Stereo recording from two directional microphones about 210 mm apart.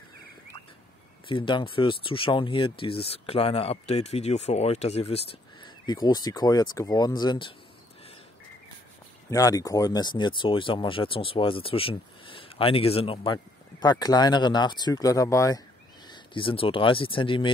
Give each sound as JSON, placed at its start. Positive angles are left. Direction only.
{"t": 1.3, "sound": "speech", "side_deg": 25}
{"t": 9.3, "sound": "speech", "side_deg": 15}